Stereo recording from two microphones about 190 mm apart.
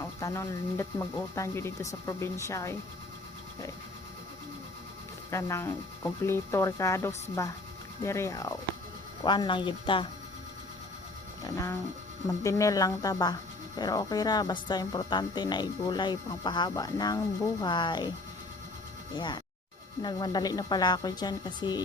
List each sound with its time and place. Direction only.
0.0 s speech: 15° left (ahead or behind)
5.3 s speech: 15° left (ahead or behind)
11.4 s speech: 15° left (ahead or behind)
19.1 s speech: 25° left (ahead or behind)